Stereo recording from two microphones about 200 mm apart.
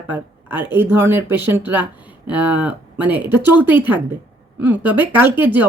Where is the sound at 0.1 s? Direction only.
10° right (ahead or behind).